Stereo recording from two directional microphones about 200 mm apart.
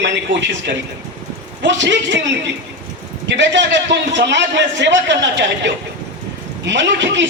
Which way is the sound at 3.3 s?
60° right (ahead or behind).